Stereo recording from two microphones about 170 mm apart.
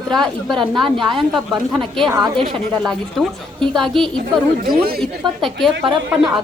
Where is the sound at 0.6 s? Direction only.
30° right (ahead or behind).